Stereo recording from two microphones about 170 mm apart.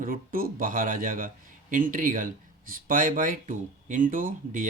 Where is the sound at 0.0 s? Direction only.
55° right (ahead or behind).